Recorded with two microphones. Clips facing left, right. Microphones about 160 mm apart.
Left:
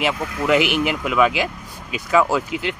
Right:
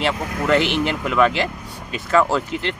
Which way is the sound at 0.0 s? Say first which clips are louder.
Even; 10° left (ahead or behind).